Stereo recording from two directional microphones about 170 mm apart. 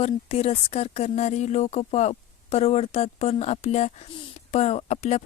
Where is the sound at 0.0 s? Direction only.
35° left (ahead or behind).